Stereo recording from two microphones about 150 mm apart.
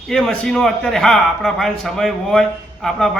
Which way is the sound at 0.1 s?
5° left (ahead or behind).